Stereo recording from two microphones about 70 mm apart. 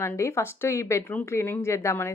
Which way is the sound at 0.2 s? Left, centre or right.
Left.